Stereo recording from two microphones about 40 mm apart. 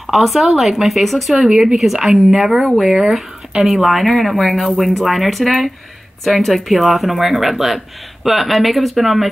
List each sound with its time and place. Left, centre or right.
0.0 s speech: centre
1.5 s speech: right
2.0 s speech: centre